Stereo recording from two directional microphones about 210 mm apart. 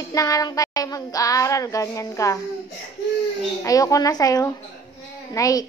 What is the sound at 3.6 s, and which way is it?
Child singing, 15° left (ahead or behind).